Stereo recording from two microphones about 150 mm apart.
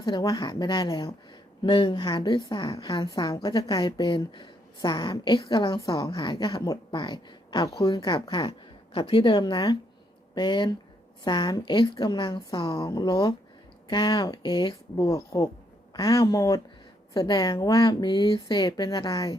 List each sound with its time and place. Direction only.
0.0 s a woman's voice: 25° left (ahead or behind)